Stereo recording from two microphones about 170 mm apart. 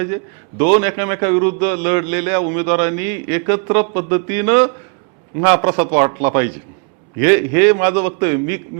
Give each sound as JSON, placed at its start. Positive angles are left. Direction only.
{"t": 0.6, "sound": "a man's voice", "side_deg": -15}